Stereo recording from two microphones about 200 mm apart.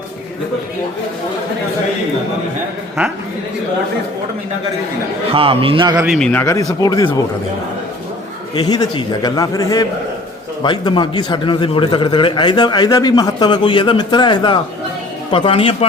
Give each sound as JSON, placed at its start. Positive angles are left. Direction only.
{"t": 5.3, "sound": "a man's voice", "side_deg": -25}
{"t": 6.0, "sound": "speech", "side_deg": 0}
{"t": 6.4, "sound": "a man's voice", "side_deg": 15}
{"t": 8.5, "sound": "a man's voice", "side_deg": 20}